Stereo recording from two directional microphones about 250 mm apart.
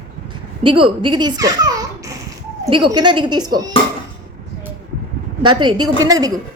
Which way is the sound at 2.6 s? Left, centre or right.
Centre.